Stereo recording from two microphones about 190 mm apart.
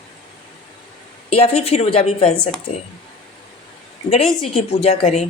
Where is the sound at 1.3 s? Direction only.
30° left (ahead or behind).